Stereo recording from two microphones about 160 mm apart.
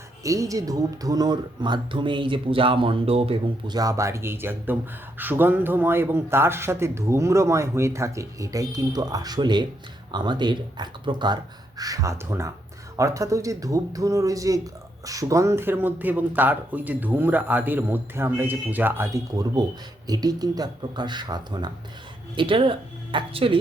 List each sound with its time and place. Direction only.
0.2 s speech: 20° right (ahead or behind)